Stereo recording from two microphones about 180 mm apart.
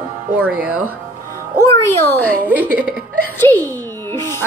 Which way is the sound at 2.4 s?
10° right (ahead or behind).